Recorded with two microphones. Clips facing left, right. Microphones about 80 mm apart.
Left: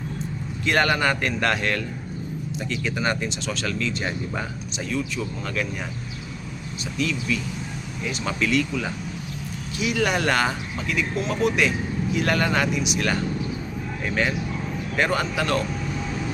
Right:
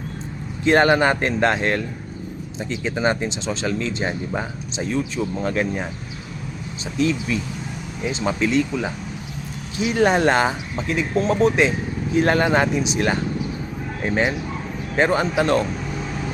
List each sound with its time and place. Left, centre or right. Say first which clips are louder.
0.6 s speech: right 6 dB; right
7.0 s speech: right 5 dB; right